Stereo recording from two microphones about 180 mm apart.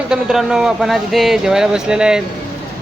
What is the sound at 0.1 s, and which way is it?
Speech, 5° right (ahead or behind).